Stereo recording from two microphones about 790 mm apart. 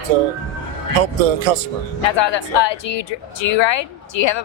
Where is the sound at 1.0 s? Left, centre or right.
Right.